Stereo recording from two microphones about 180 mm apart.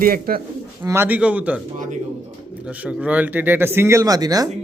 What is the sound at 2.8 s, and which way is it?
Speech, 10° right (ahead or behind).